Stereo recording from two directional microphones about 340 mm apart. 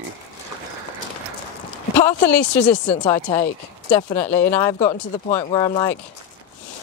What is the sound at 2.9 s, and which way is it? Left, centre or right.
Speech, centre.